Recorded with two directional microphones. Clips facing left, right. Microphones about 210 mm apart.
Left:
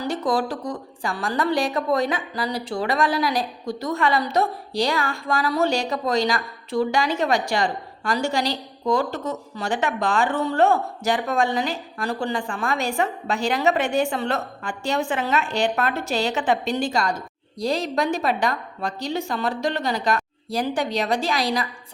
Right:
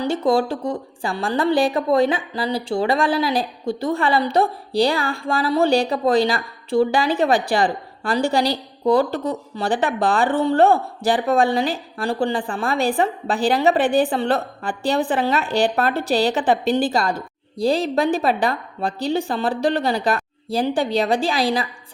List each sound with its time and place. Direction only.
0.0 s speech: 25° right (ahead or behind)